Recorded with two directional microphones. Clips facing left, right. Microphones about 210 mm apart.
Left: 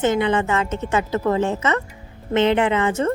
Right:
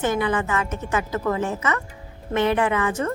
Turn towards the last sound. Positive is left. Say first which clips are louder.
# left 3 dB
turn(degrees=25)  # may be behind; listen again after turning